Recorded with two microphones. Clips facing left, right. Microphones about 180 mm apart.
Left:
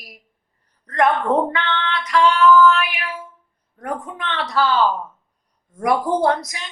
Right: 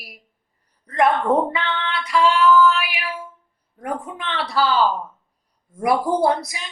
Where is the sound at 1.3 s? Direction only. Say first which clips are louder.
Even; 5° right (ahead or behind).